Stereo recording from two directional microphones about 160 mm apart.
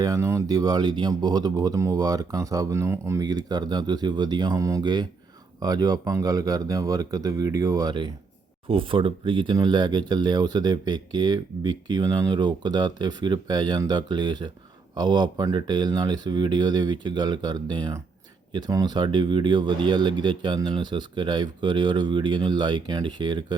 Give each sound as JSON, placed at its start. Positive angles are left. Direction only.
{"t": 0.0, "sound": "speech", "side_deg": -20}